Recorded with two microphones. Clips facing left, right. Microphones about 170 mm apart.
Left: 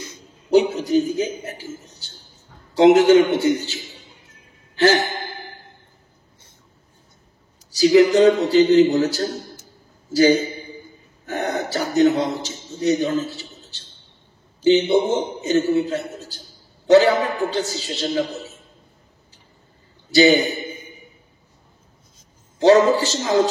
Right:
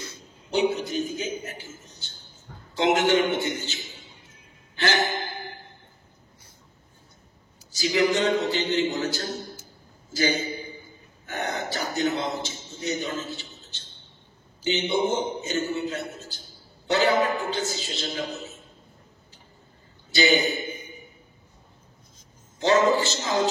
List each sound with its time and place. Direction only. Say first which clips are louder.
0.5 s a man's voice: left 8 dB; 40° left (ahead or behind)
7.7 s a man's voice: left 10 dB; 40° left (ahead or behind)
20.2 s a man's voice: left 8 dB; 40° left (ahead or behind)
22.6 s a man's voice: left 7 dB; 40° left (ahead or behind)